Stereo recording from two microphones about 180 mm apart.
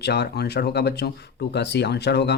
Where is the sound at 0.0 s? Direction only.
65° left (ahead or behind).